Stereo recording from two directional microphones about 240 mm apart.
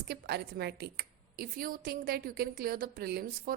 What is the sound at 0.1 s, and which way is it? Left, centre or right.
A woman's voice, right.